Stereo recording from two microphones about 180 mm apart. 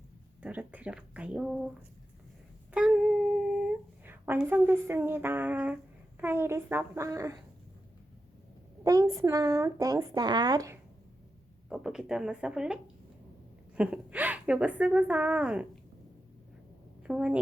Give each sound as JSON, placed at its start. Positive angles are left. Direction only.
{"t": 0.4, "sound": "a woman's voice", "side_deg": -10}
{"t": 2.7, "sound": "humming", "side_deg": -5}
{"t": 6.1, "sound": "a woman's voice", "side_deg": -10}
{"t": 8.8, "sound": "a woman's voice", "side_deg": -20}
{"t": 11.7, "sound": "a woman's voice", "side_deg": -5}
{"t": 17.0, "sound": "a woman's voice", "side_deg": -5}